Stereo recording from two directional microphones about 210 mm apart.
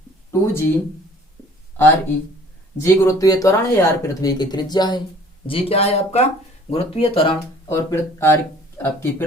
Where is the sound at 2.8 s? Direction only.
15° left (ahead or behind).